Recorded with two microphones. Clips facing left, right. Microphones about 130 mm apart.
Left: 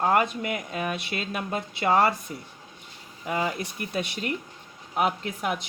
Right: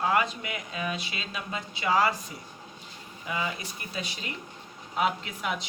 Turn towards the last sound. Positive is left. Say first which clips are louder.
# left 2 dB
turn(degrees=50)  # may be behind; listen again after turning